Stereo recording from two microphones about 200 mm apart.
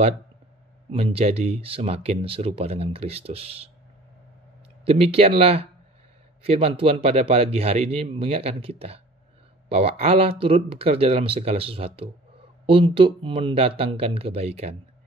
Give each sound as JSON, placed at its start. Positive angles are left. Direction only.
{"t": 0.9, "sound": "speech", "side_deg": -30}
{"t": 4.8, "sound": "speech", "side_deg": -30}